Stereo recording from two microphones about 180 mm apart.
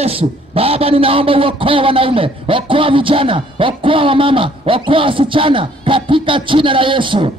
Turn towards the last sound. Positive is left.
turn(degrees=-30)  # may be behind; listen again after turning